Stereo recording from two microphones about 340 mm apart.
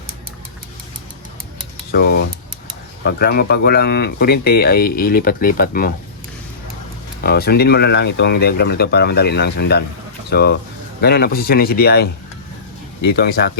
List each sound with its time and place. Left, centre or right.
1.9 s speech: left
7.2 s speech: left
13.1 s speech: left